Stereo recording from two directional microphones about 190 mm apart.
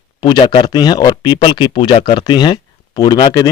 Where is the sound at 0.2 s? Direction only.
25° left (ahead or behind).